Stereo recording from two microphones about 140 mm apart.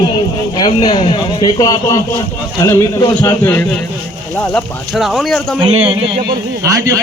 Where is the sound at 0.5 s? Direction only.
30° left (ahead or behind).